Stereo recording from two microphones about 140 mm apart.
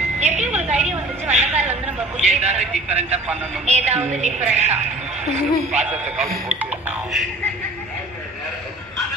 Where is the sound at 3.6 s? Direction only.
50° right (ahead or behind).